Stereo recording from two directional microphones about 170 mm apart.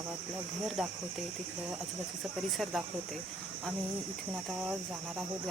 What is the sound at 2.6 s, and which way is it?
Cricket, centre (ahead or behind).